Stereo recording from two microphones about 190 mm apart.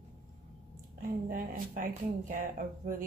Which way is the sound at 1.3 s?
45° right (ahead or behind).